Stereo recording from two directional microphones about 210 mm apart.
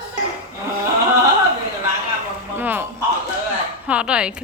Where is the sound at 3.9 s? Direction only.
5° right (ahead or behind).